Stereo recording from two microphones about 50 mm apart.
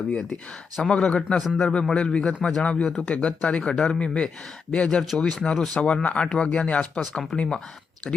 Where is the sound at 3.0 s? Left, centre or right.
Left.